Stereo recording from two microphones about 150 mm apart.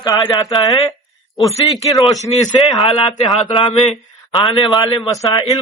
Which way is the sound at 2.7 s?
35° left (ahead or behind).